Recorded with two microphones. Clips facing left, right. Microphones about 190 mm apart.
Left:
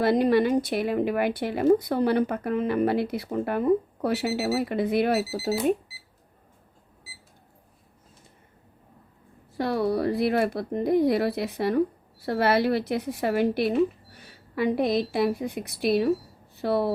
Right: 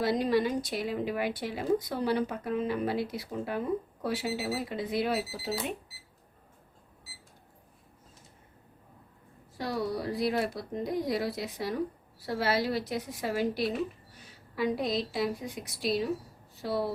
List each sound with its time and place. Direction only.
0.0 s speech: 60° left (ahead or behind)
9.6 s speech: 60° left (ahead or behind)